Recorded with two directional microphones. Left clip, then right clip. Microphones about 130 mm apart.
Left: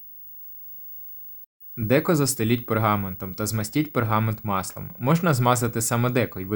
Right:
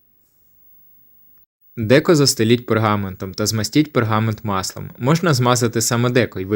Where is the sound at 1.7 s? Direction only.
25° right (ahead or behind).